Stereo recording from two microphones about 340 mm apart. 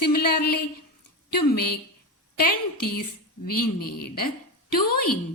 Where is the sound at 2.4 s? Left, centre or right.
Left.